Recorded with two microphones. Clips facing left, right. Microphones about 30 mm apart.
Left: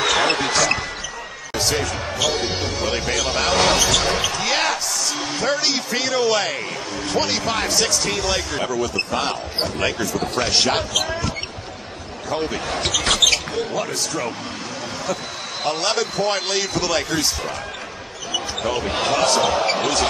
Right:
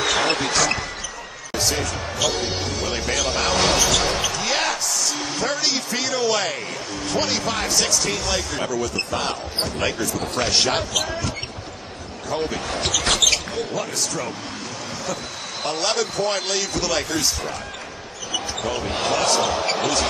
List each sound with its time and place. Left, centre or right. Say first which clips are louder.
0.0 s basketball bounce: left 2 dB; centre
1.5 s speech: left 2 dB; centre
13.2 s a sound: left 2 dB; centre
15.6 s speech: left 1 dB; centre